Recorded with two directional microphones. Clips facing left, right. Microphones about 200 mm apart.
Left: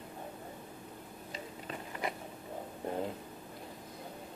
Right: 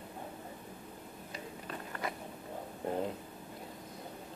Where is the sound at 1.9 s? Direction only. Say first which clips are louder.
Left 2 dB; 20° left (ahead or behind).